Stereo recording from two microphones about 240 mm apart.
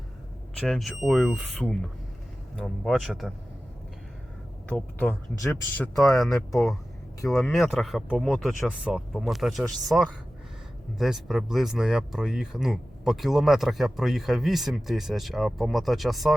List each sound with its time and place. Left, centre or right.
0.5 s speech: centre
4.7 s speech: centre